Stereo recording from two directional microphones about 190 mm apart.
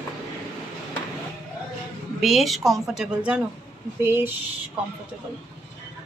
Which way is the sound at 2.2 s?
Centre (ahead or behind).